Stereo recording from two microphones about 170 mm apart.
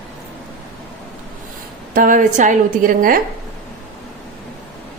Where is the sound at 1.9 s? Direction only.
50° right (ahead or behind).